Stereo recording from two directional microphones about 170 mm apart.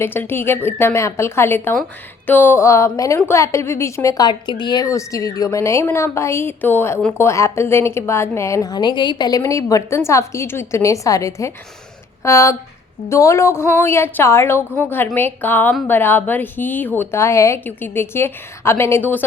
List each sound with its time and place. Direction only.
0.0 s a woman's voice: 15° left (ahead or behind)